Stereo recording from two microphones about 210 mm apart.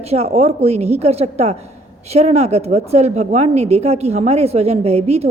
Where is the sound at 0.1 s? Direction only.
30° right (ahead or behind).